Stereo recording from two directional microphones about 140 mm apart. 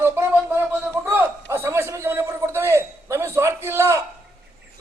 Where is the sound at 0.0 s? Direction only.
15° right (ahead or behind).